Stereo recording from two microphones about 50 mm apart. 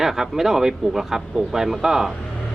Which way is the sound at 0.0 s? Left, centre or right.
Centre.